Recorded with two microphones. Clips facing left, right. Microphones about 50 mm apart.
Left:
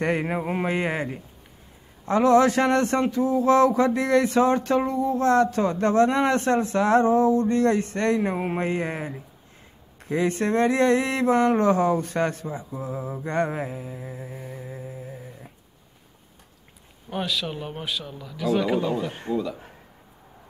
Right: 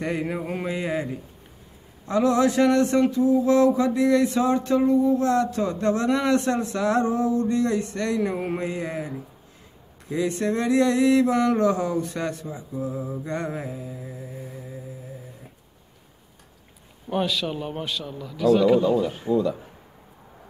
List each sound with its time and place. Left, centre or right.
0.0 s speech: left
0.4 s a sound: left
0.7 s speech: left
2.0 s speech: left
17.1 s a man's voice: centre
19.1 s speech: left